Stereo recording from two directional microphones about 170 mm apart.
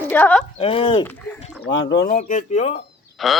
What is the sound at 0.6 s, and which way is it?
Speech, 30° left (ahead or behind).